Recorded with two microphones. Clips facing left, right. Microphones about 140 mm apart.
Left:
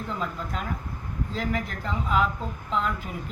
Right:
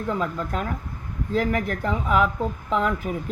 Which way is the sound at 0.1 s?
50° right (ahead or behind).